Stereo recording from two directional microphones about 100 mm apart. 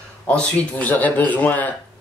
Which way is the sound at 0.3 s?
10° left (ahead or behind).